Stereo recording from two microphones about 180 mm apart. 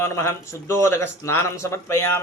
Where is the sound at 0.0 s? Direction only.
15° left (ahead or behind).